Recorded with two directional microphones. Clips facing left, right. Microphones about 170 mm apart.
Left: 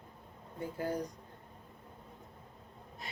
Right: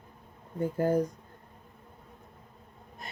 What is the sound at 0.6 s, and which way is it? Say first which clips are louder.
Speech: right 10 dB; 50° right (ahead or behind).